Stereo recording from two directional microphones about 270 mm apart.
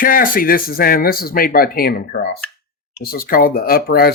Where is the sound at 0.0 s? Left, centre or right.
Left.